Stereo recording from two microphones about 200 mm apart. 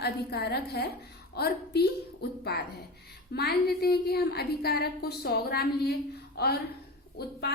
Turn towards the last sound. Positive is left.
turn(degrees=50)  # may be behind; listen again after turning